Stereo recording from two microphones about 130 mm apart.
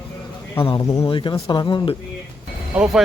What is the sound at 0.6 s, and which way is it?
Speech, 35° left (ahead or behind).